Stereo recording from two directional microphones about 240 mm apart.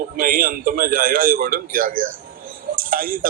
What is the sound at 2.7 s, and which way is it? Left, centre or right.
Tick, right.